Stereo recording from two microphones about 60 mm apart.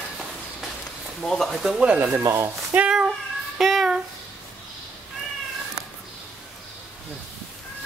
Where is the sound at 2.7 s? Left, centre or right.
Right.